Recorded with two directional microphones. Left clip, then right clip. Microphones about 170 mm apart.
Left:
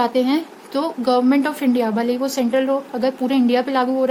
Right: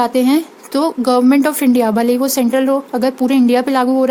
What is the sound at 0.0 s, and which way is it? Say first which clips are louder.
Speech: right 4 dB; 50° right (ahead or behind).